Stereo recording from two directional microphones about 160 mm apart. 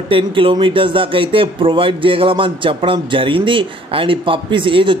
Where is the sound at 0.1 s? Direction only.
30° right (ahead or behind).